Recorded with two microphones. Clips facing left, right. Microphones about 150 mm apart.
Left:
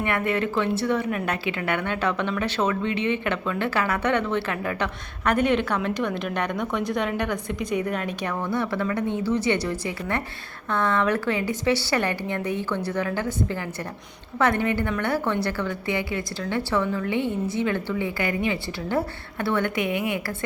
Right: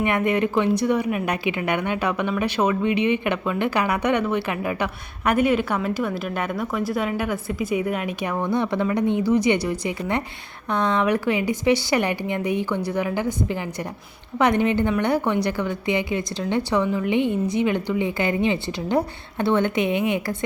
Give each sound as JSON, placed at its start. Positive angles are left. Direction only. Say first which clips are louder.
{"t": 0.0, "sound": "a woman's voice", "louder": "right 4 dB", "side_deg": -15}